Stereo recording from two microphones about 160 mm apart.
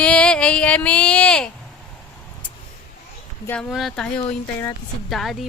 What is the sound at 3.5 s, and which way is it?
Speech, centre (ahead or behind).